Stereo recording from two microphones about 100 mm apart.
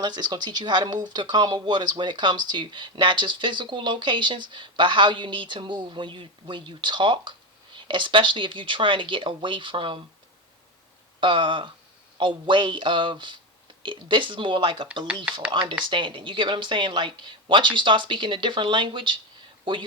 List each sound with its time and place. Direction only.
0.0 s speech: 45° right (ahead or behind)
11.2 s speech: 55° right (ahead or behind)
15.2 s speech: 10° right (ahead or behind)
15.8 s speech: 55° right (ahead or behind)